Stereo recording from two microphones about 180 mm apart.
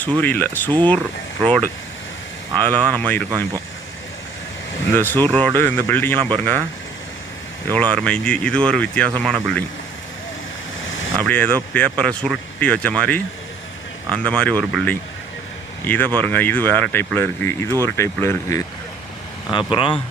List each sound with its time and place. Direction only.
0.2 s speech: 10° left (ahead or behind)
4.9 s speech: 10° left (ahead or behind)
7.7 s speech: 5° left (ahead or behind)
10.8 s vehicle: 90° left
11.2 s speech: 10° left (ahead or behind)
19.5 s speech: 25° left (ahead or behind)